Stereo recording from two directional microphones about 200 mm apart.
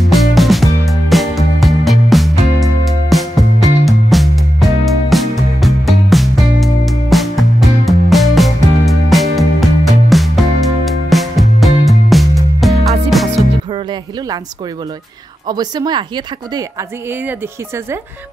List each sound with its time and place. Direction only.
0.1 s music: centre (ahead or behind)
15.4 s a woman's voice: 20° right (ahead or behind)